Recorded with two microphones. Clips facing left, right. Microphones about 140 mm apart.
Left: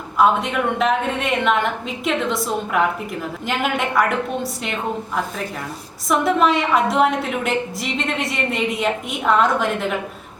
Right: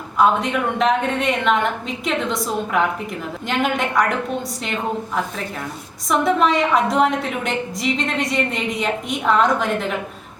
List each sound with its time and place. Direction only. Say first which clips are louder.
0.2 s a woman's voice: even; centre (ahead or behind)